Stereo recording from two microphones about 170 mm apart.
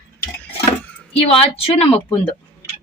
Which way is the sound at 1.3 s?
35° left (ahead or behind).